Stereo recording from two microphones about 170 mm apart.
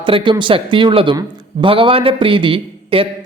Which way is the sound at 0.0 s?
30° right (ahead or behind).